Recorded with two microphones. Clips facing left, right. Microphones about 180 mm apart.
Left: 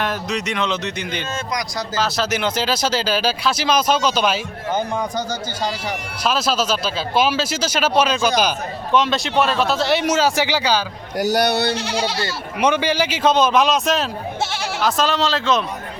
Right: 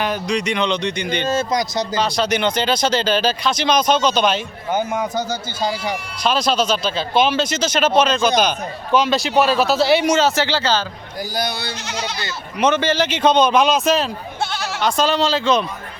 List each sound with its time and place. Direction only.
0.0 s speech: centre (ahead or behind)
1.3 s speech: 30° right (ahead or behind)
2.0 s speech: 5° left (ahead or behind)
4.7 s speech: 10° right (ahead or behind)
6.2 s speech: 5° left (ahead or behind)
11.2 s speech: 75° left (ahead or behind)
12.5 s speech: 10° left (ahead or behind)